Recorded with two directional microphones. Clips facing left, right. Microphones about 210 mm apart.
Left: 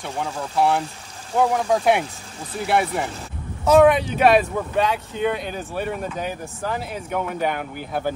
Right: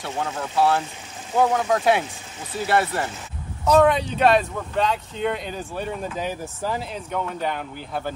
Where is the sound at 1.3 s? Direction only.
5° right (ahead or behind).